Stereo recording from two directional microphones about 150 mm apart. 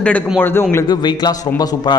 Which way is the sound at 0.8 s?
25° left (ahead or behind).